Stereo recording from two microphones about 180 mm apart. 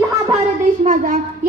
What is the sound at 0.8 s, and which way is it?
Speech, 45° right (ahead or behind).